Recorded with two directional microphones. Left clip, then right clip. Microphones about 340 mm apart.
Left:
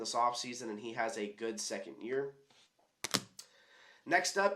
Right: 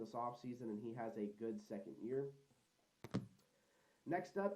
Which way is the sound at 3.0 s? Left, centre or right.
Centre.